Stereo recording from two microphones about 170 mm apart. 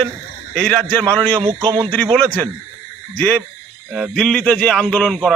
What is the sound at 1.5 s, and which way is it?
Speech, 25° right (ahead or behind).